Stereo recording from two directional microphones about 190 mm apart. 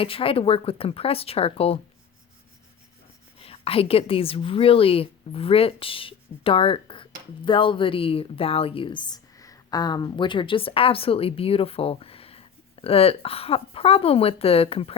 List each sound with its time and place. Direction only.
0.0 s speech: 30° left (ahead or behind)
3.3 s a woman's voice: 30° left (ahead or behind)